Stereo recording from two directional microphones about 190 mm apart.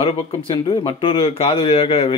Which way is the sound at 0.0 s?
30° left (ahead or behind).